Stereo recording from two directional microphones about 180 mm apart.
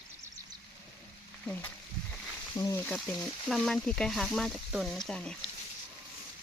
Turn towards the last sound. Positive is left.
turn(degrees=5)  # may be behind; listen again after turning